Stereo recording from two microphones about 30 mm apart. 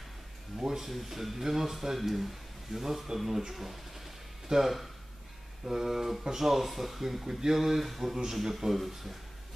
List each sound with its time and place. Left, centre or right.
0.6 s speech: centre